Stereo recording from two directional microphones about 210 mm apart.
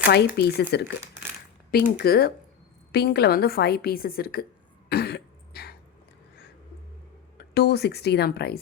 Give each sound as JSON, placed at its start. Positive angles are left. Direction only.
{"t": 0.0, "sound": "a woman's voice", "side_deg": 50}
{"t": 4.9, "sound": "cough", "side_deg": 50}
{"t": 7.3, "sound": "a woman's voice", "side_deg": 50}